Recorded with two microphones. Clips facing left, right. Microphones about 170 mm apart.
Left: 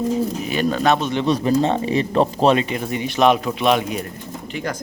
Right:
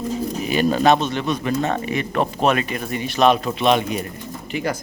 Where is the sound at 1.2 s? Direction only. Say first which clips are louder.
Left 4 dB; 35° left (ahead or behind).